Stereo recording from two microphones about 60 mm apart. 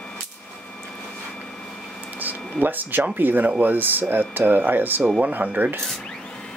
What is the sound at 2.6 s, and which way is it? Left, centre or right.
Speech, right.